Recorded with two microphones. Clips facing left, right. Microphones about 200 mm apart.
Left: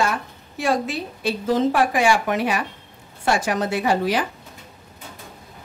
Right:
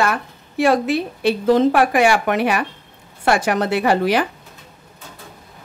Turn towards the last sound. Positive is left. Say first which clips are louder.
# right 4 dB
turn(degrees=-65)  # may be behind; listen again after turning